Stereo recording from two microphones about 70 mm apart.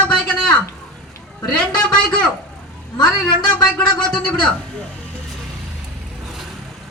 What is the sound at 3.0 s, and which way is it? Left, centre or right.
A man's voice, centre.